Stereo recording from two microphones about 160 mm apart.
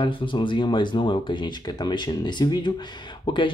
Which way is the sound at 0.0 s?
30° left (ahead or behind).